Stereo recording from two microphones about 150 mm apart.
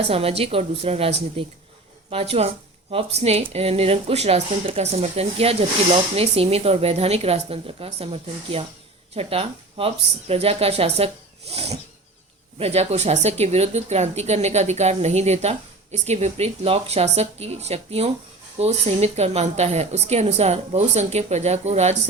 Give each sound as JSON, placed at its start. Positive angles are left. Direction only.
{"t": 0.1, "sound": "speech", "side_deg": -40}